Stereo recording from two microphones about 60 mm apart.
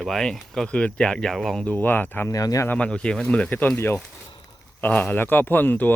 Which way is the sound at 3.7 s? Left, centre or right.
Left.